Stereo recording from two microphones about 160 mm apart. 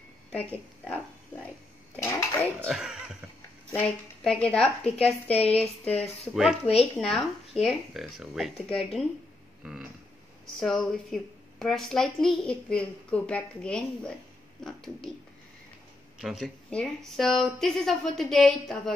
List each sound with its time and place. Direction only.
2.0 s speech: 15° left (ahead or behind)
2.6 s a woman's voice: 5° right (ahead or behind)
3.7 s a woman's voice: 5° left (ahead or behind)
5.3 s speech: 40° left (ahead or behind)
6.3 s a woman's voice: centre (ahead or behind)
10.6 s a woman's voice: centre (ahead or behind)
16.2 s a woman's voice: centre (ahead or behind)